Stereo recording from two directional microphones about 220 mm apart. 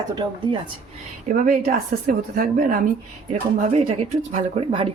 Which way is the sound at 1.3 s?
35° right (ahead or behind).